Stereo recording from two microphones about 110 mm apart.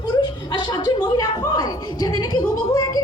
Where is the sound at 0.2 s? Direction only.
40° left (ahead or behind).